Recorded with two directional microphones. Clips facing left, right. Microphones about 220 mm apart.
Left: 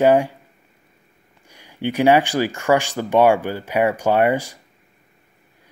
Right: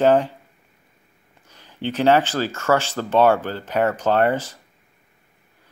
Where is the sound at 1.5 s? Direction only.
10° left (ahead or behind).